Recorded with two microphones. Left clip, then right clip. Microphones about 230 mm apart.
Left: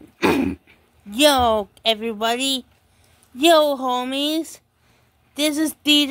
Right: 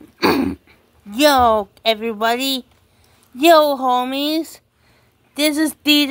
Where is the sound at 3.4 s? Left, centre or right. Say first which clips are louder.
Right 3 dB; centre.